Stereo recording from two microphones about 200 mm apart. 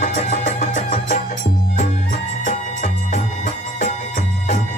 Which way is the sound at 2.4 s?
40° left (ahead or behind).